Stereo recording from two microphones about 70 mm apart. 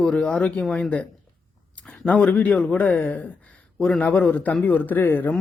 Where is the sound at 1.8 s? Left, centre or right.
Centre.